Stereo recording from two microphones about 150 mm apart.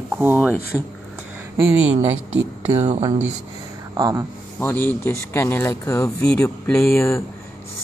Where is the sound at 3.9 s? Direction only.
25° right (ahead or behind).